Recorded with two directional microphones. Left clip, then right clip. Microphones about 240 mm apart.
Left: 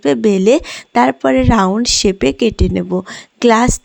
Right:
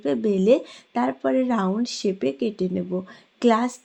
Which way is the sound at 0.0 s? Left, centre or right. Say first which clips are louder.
Left 10 dB; left.